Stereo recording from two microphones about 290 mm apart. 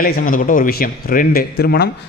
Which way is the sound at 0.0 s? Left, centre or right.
Left.